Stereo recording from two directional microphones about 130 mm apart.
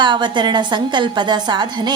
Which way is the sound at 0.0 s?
35° right (ahead or behind).